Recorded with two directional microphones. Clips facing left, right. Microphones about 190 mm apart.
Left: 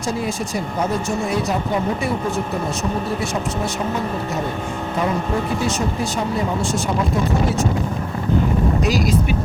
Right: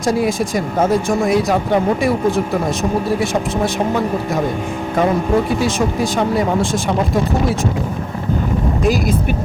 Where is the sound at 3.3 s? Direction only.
90° right.